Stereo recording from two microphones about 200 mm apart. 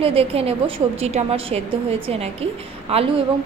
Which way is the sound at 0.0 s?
30° right (ahead or behind).